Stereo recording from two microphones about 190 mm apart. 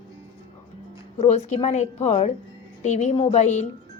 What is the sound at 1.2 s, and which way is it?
Speech, 35° left (ahead or behind).